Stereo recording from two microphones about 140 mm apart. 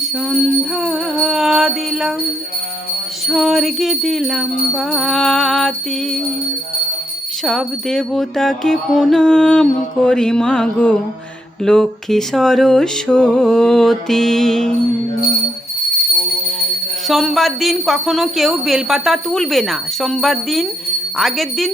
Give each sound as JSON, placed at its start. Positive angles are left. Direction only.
{"t": 0.8, "sound": "music", "side_deg": 0}
{"t": 3.2, "sound": "speech", "side_deg": 0}
{"t": 7.4, "sound": "speech", "side_deg": 0}
{"t": 17.1, "sound": "speech", "side_deg": 0}